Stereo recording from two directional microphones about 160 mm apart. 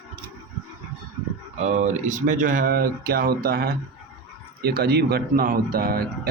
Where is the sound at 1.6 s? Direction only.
45° right (ahead or behind); by 6.3 s 70° right (ahead or behind).